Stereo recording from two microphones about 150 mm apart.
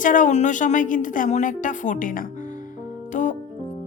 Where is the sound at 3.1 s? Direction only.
55° left (ahead or behind).